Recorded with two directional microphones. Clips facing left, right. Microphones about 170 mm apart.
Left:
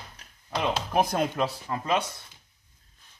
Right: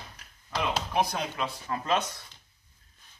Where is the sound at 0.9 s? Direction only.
50° left (ahead or behind).